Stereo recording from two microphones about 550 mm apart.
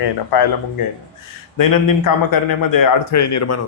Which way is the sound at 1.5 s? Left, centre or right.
Left.